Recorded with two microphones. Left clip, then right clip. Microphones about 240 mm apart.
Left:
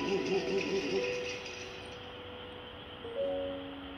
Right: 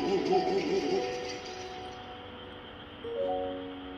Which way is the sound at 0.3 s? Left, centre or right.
Right.